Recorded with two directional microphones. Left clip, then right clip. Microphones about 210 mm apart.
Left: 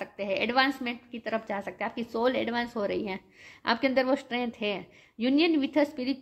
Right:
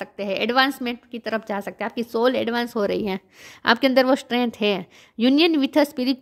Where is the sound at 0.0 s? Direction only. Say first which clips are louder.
Right 5 dB; 55° right (ahead or behind).